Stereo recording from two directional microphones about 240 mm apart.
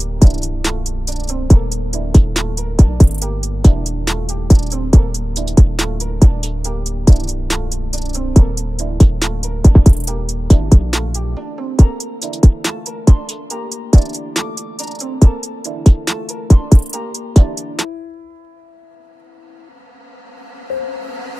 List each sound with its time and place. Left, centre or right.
0.0 s music: centre